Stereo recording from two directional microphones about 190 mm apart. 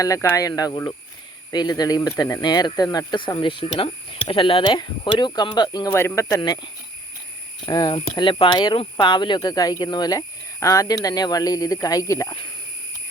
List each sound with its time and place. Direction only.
0.0 s speech: 15° left (ahead or behind)
7.6 s speech: 25° left (ahead or behind)